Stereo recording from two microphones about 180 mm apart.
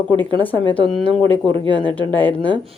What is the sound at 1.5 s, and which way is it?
Speech, 25° right (ahead or behind).